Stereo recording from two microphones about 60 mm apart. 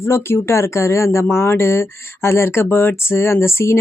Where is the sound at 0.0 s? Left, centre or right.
Left.